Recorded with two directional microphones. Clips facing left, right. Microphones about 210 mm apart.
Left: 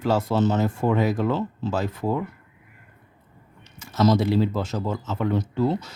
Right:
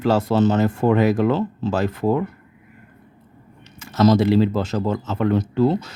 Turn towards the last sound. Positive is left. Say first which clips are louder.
# right 5 dB
turn(degrees=-85)